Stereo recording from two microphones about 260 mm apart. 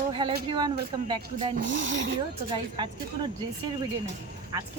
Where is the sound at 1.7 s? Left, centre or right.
Right.